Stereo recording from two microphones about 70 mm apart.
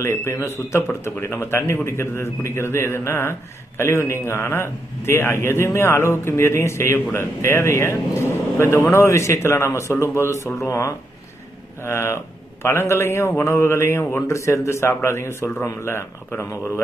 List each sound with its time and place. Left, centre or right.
0.0 s a man's voice: left